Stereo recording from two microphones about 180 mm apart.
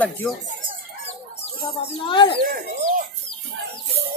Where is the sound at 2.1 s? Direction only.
25° left (ahead or behind).